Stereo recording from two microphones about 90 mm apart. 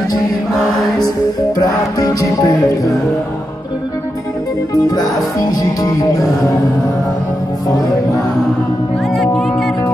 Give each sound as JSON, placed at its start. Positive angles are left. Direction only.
{"t": 1.5, "sound": "music", "side_deg": 50}
{"t": 4.8, "sound": "music", "side_deg": 45}
{"t": 9.1, "sound": "speech", "side_deg": 0}